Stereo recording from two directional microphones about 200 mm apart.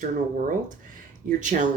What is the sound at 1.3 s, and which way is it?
Speech, 40° right (ahead or behind).